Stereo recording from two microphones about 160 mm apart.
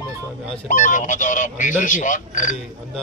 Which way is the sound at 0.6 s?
50° left (ahead or behind).